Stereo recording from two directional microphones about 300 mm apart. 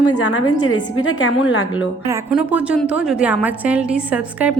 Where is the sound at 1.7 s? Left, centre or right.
Centre.